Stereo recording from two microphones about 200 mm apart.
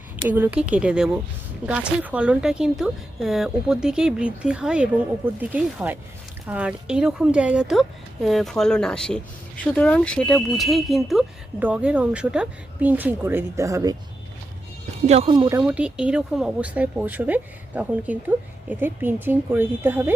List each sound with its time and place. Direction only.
0.3 s speech: 10° right (ahead or behind)
15.0 s speech: 30° right (ahead or behind); by 20.1 s 10° right (ahead or behind)